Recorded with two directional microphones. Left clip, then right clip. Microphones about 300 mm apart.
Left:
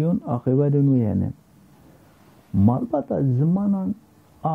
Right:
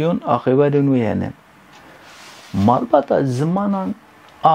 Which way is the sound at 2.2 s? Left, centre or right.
Centre.